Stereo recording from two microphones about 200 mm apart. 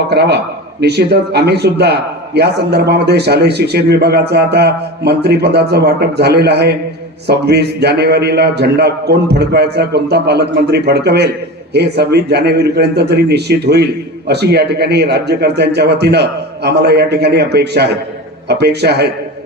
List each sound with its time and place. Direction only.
0.1 s a man's voice: 55° right (ahead or behind)